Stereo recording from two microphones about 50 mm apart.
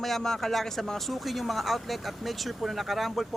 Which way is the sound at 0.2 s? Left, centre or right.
Centre.